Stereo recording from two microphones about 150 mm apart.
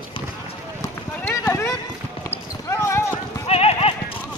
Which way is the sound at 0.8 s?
20° left (ahead or behind).